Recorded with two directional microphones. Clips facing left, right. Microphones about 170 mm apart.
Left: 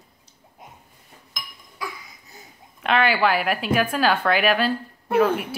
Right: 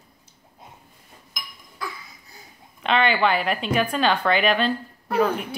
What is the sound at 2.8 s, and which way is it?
Speech, 5° left (ahead or behind).